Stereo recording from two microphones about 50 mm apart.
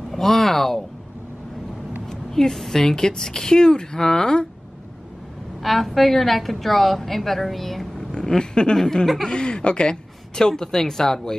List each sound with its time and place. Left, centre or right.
0.1 s speech: centre
2.0 s speech: centre
5.6 s a woman's voice: centre
8.1 s speech: centre
9.3 s speech: centre
10.3 s speech: centre